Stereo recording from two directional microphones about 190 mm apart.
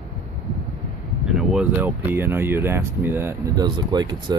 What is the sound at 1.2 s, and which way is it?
Speech, 5° right (ahead or behind).